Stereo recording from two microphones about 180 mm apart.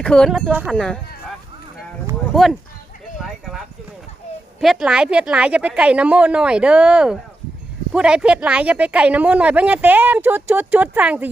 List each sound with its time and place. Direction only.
0.0 s a woman's voice: 5° left (ahead or behind)
2.3 s a woman's voice: centre (ahead or behind)
4.6 s a woman's voice: centre (ahead or behind)